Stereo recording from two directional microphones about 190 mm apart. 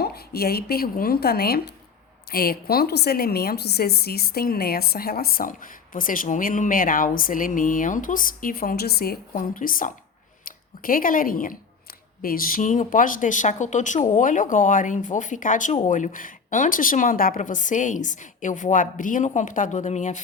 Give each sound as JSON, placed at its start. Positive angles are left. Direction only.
{"t": 0.0, "sound": "a woman's voice", "side_deg": 55}